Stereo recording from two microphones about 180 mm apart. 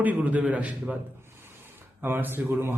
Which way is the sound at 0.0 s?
10° right (ahead or behind).